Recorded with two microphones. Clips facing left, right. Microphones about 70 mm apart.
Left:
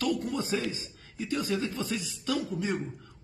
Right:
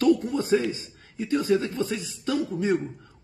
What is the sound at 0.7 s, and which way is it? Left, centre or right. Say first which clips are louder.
Speech: right 3 dB; right.